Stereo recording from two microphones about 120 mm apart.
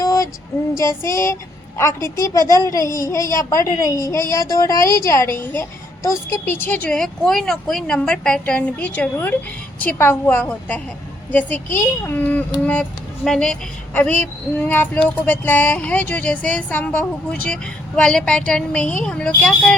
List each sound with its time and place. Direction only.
0.0 s child singing: 30° left (ahead or behind)
0.8 s a woman's voice: 25° left (ahead or behind); by 19.7 s 10° left (ahead or behind)